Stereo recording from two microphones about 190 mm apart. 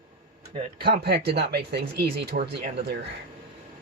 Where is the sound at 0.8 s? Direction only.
55° right (ahead or behind).